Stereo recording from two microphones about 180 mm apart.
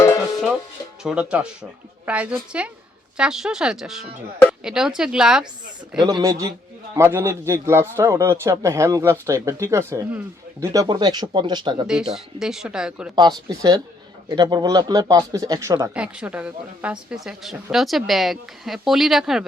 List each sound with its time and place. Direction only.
1.0 s a woman's voice: 5° right (ahead or behind)
6.0 s speech: 25° right (ahead or behind)
12.1 s a woman's voice: centre (ahead or behind)
13.1 s speech: 20° right (ahead or behind)
16.0 s a woman's voice: 5° right (ahead or behind)